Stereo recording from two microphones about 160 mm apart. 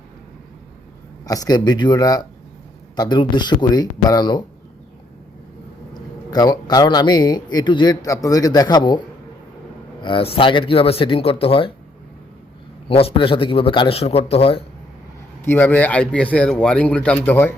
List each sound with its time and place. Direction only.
1.2 s speech: 20° left (ahead or behind)
5.9 s speech: 25° left (ahead or behind)
10.0 s speech: 35° left (ahead or behind)
12.9 s speech: 35° left (ahead or behind)
15.4 s speech: 10° left (ahead or behind)